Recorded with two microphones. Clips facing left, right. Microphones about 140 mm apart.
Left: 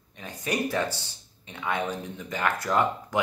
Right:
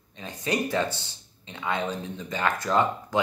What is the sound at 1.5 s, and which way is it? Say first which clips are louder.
Speech: even; 20° right (ahead or behind).